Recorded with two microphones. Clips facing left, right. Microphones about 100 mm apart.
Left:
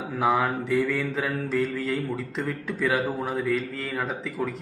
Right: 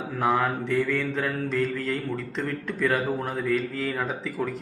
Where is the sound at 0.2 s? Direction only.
Centre (ahead or behind).